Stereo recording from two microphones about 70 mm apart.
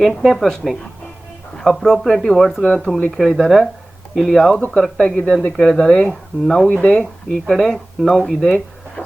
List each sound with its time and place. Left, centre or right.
0.0 s speech: centre
5.1 s speech: centre
5.5 s speech: centre